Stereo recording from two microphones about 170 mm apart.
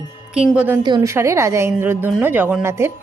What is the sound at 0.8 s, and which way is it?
A woman's voice, 20° right (ahead or behind).